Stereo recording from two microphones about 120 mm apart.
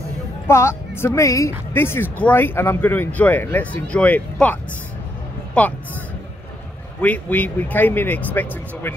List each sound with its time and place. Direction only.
0.5 s speech: 20° left (ahead or behind)
5.6 s speech: 10° left (ahead or behind)
7.0 s speech: 15° left (ahead or behind)